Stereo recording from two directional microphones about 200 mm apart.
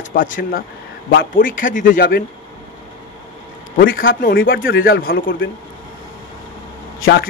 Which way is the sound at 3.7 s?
45° left (ahead or behind).